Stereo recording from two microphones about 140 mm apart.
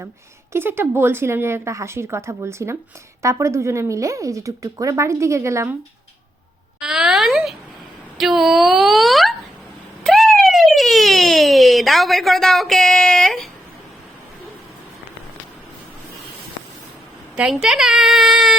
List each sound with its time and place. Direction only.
0.5 s speech: 15° right (ahead or behind)
6.7 s a woman's voice: 5° right (ahead or behind)
10.0 s police car: centre (ahead or behind)
17.3 s a woman's voice: 5° right (ahead or behind)